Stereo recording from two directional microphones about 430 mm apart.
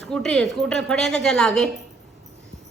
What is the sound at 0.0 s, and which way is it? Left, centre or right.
A woman's voice, centre.